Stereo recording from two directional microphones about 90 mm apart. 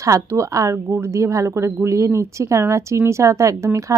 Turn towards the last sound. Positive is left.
turn(degrees=-35)  # may be behind; listen again after turning